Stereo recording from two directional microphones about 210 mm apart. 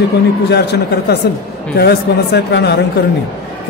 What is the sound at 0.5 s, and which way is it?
A man's voice, 50° left (ahead or behind).